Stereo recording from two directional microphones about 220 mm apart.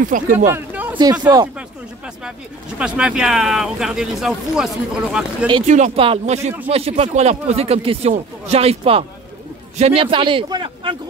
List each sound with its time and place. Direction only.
0.1 s speech: 40° right (ahead or behind)
0.5 s a sound: 10° right (ahead or behind)
1.2 s speech: 20° right (ahead or behind)
2.8 s speech: 5° right (ahead or behind)
5.7 s a man's voice: 30° right (ahead or behind)